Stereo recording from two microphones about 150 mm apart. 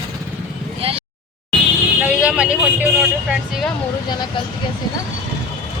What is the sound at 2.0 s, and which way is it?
Vehicle, 5° right (ahead or behind).